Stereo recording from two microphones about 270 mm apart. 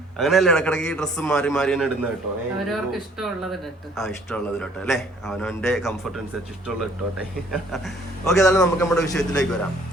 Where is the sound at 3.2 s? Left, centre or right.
Centre.